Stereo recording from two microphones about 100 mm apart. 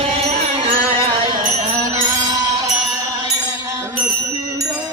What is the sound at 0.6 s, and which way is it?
Music, 75° right (ahead or behind).